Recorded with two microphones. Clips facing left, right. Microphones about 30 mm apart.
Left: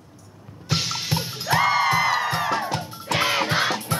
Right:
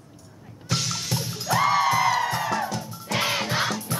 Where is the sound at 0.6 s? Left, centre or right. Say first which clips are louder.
Left 2 dB; left.